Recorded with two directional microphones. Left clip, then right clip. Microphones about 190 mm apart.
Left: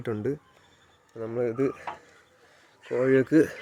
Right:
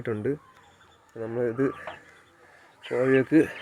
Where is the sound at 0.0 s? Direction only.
15° left (ahead or behind).